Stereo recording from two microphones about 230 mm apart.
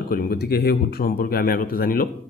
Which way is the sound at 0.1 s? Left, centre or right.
Left.